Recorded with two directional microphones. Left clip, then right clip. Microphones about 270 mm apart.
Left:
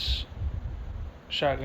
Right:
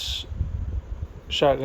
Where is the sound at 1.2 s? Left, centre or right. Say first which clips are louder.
Right 7 dB; right.